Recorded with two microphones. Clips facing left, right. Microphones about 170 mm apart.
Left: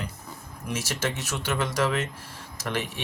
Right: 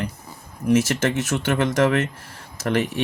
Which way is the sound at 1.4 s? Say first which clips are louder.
Right 6 dB; 55° right (ahead or behind).